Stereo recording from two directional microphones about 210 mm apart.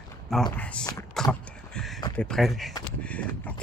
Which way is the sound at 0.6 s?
5° left (ahead or behind).